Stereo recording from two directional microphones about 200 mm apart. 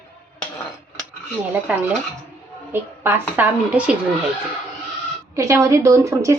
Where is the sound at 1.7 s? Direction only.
10° right (ahead or behind).